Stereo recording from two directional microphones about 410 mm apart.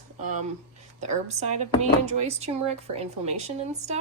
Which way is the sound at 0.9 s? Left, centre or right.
Centre.